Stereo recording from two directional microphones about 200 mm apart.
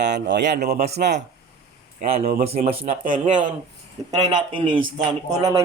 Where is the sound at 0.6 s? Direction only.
35° right (ahead or behind).